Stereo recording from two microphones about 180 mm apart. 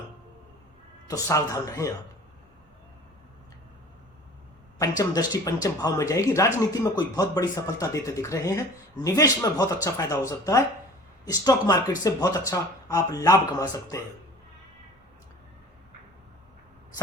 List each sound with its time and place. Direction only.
1.0 s speech: 20° left (ahead or behind)
4.8 s speech: 20° left (ahead or behind)